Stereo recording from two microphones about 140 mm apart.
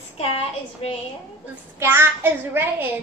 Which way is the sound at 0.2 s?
45° left (ahead or behind).